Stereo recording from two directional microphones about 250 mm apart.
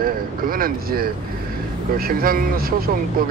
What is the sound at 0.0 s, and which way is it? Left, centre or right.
A man's voice, right.